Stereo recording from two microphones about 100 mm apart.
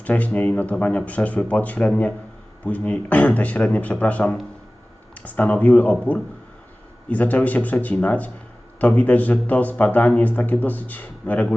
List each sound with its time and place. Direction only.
0.0 s speech: 15° left (ahead or behind)